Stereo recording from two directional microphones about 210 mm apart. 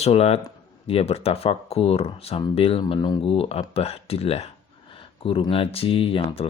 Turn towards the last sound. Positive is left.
turn(degrees=25)  # may be behind; listen again after turning